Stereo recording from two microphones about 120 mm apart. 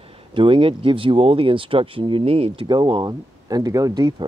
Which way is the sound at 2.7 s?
40° right (ahead or behind).